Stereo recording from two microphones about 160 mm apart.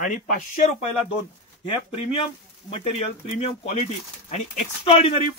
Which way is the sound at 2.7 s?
40° left (ahead or behind).